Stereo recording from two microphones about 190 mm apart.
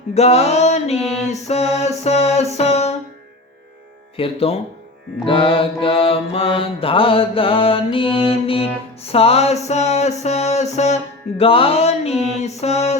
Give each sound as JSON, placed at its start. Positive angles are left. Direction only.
{"t": 0.1, "sound": "speech", "side_deg": 35}
{"t": 4.2, "sound": "mantra", "side_deg": 30}
{"t": 9.1, "sound": "speech", "side_deg": 30}